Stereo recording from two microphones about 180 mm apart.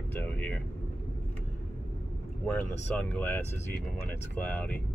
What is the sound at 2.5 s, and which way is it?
Speech, 10° left (ahead or behind).